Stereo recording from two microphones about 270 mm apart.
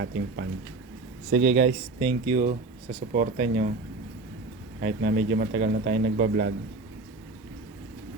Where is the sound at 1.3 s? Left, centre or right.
Right.